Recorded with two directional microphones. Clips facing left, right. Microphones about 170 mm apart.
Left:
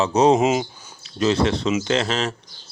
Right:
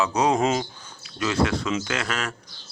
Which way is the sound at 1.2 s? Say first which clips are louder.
Left 4 dB; 25° left (ahead or behind).